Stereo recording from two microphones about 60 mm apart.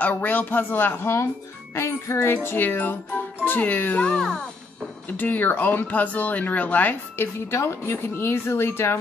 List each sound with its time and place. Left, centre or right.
0.0 s speech: left
1.8 s speech: left
2.3 s speech: left
4.0 s a child's voice: centre
5.1 s speech: left
7.5 s speech: left